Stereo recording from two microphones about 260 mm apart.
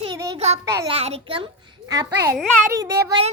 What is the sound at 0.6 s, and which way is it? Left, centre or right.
A child's voice, centre.